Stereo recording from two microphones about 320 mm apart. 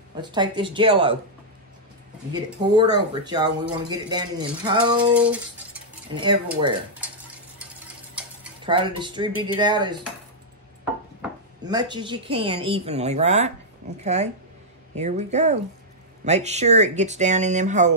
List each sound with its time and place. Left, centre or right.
0.2 s speech: centre
2.3 s speech: centre
6.1 s speech: centre
8.1 s stir: centre
8.6 s speech: centre
11.6 s speech: centre